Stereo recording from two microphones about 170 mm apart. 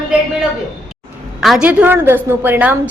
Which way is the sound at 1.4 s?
5° right (ahead or behind).